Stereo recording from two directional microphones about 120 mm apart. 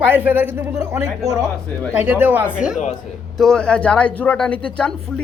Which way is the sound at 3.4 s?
5° left (ahead or behind).